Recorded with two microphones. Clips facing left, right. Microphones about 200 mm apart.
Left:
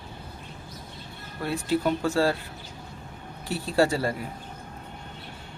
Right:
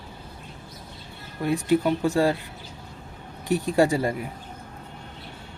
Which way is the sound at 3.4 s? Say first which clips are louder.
Right 3 dB; 15° right (ahead or behind).